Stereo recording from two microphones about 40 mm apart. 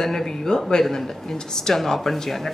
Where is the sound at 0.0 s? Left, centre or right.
Centre.